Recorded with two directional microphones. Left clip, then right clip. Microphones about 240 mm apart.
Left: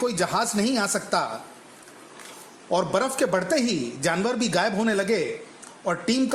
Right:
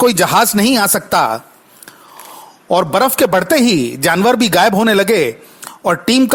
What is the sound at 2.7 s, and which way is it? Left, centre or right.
Speech, right.